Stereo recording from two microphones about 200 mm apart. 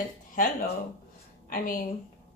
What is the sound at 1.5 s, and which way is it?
Speech, 45° left (ahead or behind).